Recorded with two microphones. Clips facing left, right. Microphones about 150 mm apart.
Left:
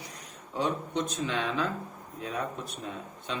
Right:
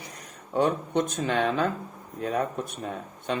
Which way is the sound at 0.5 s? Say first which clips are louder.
Right 6 dB; 55° right (ahead or behind).